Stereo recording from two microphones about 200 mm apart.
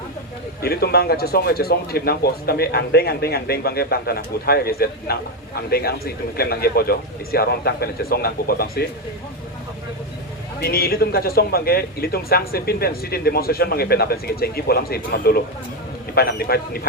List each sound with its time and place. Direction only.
0.6 s speech: 50° left (ahead or behind)
10.6 s speech: 50° left (ahead or behind)